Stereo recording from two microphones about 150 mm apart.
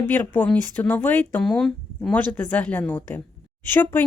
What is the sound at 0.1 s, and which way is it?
Speech, 10° left (ahead or behind).